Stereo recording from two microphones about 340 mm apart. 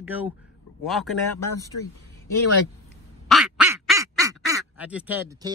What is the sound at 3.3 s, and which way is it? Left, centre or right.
Quack, centre.